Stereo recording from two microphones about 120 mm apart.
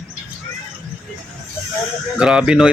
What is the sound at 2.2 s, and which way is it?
Speech, 5° right (ahead or behind).